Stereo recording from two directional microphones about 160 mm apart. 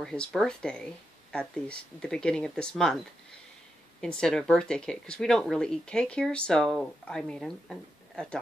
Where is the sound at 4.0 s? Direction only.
5° left (ahead or behind).